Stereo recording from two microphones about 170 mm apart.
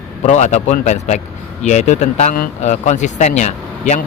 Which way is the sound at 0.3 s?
45° left (ahead or behind).